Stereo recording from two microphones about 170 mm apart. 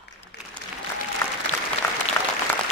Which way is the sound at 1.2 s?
15° left (ahead or behind).